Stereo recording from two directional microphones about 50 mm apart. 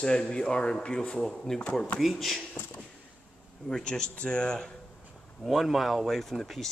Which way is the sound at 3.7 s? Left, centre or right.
Centre.